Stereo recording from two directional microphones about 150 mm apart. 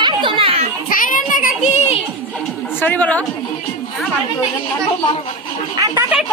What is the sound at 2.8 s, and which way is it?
Speech, 10° left (ahead or behind).